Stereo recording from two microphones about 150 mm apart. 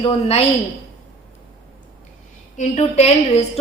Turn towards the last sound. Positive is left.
turn(degrees=45)  # may be behind; listen again after turning